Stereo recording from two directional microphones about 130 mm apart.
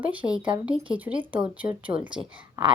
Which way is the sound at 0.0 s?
10° right (ahead or behind).